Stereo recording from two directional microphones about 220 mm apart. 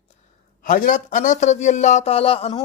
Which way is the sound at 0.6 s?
35° left (ahead or behind).